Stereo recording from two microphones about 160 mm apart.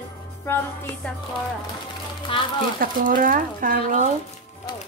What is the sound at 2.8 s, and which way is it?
Speech, 60° right (ahead or behind).